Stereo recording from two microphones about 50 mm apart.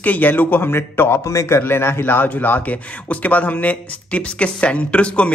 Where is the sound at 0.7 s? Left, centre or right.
Left.